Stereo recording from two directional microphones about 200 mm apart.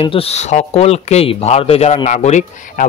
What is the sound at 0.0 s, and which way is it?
Speech, 30° left (ahead or behind).